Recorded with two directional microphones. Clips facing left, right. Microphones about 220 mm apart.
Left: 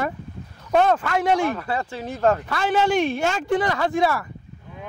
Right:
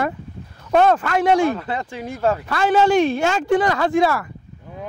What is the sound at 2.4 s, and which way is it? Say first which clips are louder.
A man's voice: right 4 dB; 75° right (ahead or behind).